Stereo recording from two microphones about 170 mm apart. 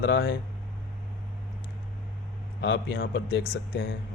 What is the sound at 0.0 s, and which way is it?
Speech, 65° left (ahead or behind).